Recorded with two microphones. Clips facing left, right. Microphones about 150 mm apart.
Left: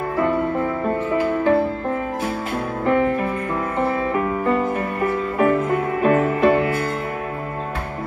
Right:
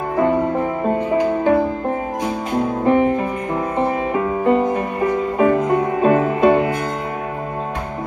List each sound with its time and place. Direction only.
0.2 s music: 20° right (ahead or behind)